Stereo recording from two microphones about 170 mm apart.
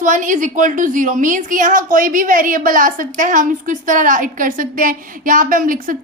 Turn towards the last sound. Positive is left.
turn(degrees=-55)  # may be behind; listen again after turning